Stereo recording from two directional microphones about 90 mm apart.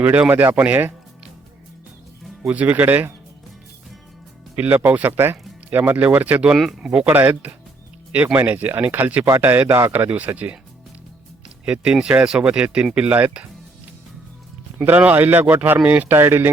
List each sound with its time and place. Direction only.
0.0 s speech: 20° right (ahead or behind)
2.5 s speech: 20° right (ahead or behind)
4.5 s speech: 20° right (ahead or behind)
6.6 s speech: centre (ahead or behind)
6.9 s speech: 20° right (ahead or behind)
11.6 s speech: 10° right (ahead or behind)
14.8 s speech: 15° right (ahead or behind)